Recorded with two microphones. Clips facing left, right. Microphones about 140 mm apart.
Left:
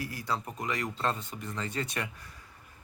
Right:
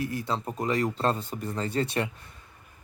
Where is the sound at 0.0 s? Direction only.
25° right (ahead or behind).